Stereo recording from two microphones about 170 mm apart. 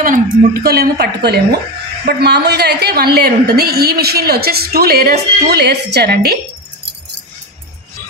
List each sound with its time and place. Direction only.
0.0 s a woman's voice: 55° right (ahead or behind)